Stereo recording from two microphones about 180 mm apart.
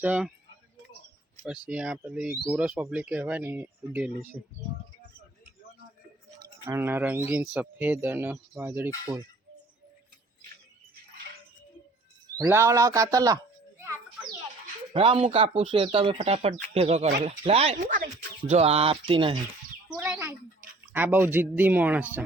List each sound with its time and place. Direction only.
0.0 s speech: 5° right (ahead or behind)
1.5 s a man's voice: 5° right (ahead or behind)
6.7 s a man's voice: 10° right (ahead or behind)
12.4 s a sound: 15° right (ahead or behind)
14.9 s speech: 30° right (ahead or behind)
20.1 s a man's voice: 5° right (ahead or behind)